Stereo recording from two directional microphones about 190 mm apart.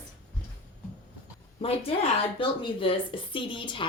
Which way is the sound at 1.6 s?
30° left (ahead or behind).